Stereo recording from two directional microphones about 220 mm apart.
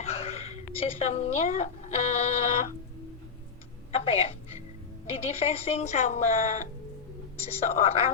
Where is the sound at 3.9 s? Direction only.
25° left (ahead or behind).